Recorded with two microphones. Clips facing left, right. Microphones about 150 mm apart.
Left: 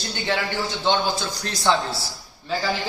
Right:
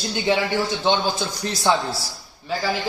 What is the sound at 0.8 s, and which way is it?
Speech, 20° right (ahead or behind).